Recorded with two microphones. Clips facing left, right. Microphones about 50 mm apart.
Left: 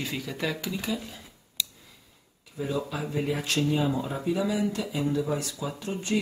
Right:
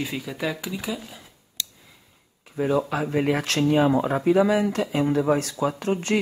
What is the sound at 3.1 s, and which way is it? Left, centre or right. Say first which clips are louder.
Speech: right 6 dB; right.